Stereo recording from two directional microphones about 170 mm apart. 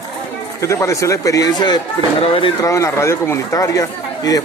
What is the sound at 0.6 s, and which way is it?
Speech, 15° left (ahead or behind).